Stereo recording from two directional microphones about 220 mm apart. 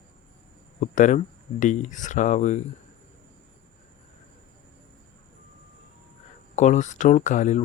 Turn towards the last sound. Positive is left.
turn(degrees=35)  # may be behind; listen again after turning